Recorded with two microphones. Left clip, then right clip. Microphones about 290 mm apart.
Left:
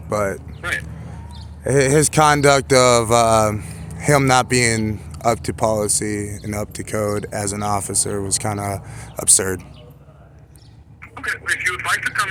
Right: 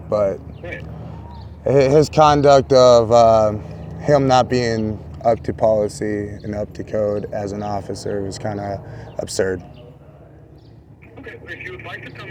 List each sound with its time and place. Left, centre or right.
0.1 s speech: centre
0.8 s duck: centre
1.6 s speech: centre
11.1 s a man's voice: left